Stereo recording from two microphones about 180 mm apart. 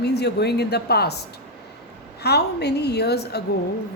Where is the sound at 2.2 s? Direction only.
65° left (ahead or behind).